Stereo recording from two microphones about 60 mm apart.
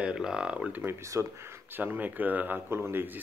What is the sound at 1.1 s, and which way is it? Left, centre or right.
Speech, right.